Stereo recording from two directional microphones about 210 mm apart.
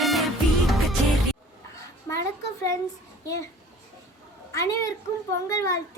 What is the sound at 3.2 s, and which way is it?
Speech, 15° left (ahead or behind).